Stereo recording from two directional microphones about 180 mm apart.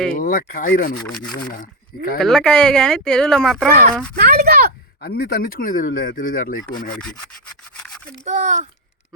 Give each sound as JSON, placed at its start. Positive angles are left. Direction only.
{"t": 0.1, "sound": "speech", "side_deg": 50}
{"t": 2.1, "sound": "speech", "side_deg": 5}
{"t": 4.1, "sound": "a sound", "side_deg": -55}
{"t": 5.0, "sound": "speech", "side_deg": 55}
{"t": 8.2, "sound": "a child's voice", "side_deg": -40}